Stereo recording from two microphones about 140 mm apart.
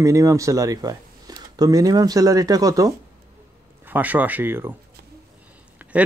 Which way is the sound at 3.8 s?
10° right (ahead or behind).